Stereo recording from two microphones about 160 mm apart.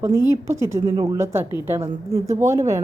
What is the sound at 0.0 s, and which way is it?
A woman's voice, 15° right (ahead or behind).